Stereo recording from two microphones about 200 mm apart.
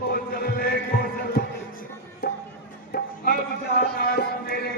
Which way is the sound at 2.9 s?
50° left (ahead or behind).